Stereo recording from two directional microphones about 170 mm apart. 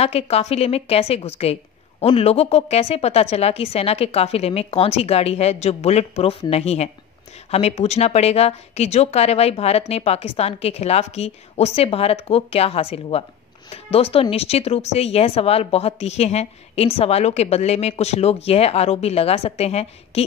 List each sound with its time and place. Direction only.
0.0 s speech: 35° left (ahead or behind)